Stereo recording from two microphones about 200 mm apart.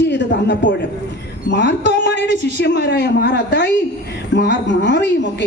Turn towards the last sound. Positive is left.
turn(degrees=60)  # may be behind; listen again after turning